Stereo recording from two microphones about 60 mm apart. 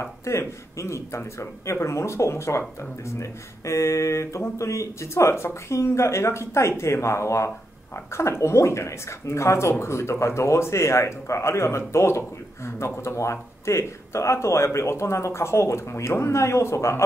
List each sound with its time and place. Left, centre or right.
0.0 s speech: left